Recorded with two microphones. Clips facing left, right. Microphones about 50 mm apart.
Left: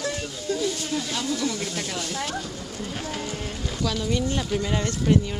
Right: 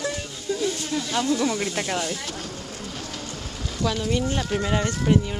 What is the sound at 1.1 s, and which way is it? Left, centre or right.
Speech, right.